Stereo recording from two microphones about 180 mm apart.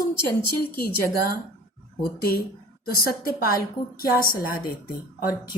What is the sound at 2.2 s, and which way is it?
A woman's voice, 55° left (ahead or behind).